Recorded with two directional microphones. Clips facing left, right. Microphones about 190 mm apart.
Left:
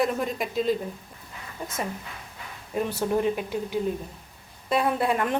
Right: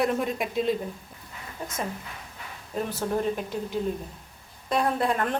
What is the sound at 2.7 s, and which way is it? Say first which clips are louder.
Speech: left 3 dB; 10° left (ahead or behind).